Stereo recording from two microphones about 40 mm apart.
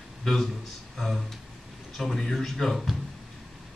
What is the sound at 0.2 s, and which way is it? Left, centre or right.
A man's voice, centre.